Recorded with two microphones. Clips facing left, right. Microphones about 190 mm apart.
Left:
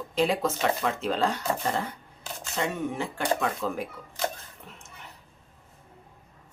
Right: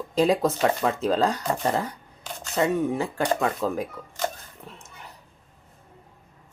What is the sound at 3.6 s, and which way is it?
Speech, 40° right (ahead or behind).